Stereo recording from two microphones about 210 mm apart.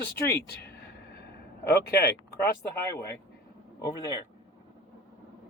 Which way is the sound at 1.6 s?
50° left (ahead or behind).